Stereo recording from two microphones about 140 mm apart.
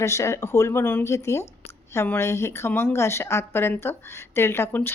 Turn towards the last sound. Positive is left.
turn(degrees=15)  # may be behind; listen again after turning